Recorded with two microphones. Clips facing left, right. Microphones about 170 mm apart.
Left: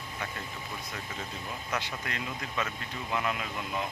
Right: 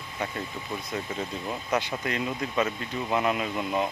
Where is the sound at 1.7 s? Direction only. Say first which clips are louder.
Right 8 dB; 20° right (ahead or behind).